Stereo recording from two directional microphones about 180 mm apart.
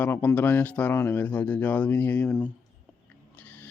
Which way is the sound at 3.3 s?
10° left (ahead or behind).